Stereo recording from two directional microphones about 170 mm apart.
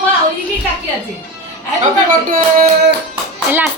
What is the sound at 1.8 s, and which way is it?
Speech, 50° right (ahead or behind).